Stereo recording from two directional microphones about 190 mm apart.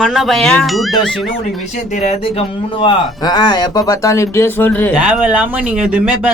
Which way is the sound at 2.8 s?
20° left (ahead or behind).